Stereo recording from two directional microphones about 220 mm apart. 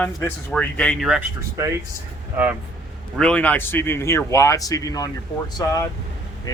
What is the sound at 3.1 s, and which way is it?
Speech, 5° left (ahead or behind).